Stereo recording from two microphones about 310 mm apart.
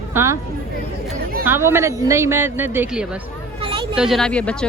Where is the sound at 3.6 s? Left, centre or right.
Centre.